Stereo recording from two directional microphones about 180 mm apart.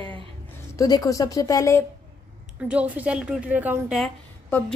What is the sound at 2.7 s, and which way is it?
A woman's voice, 10° right (ahead or behind).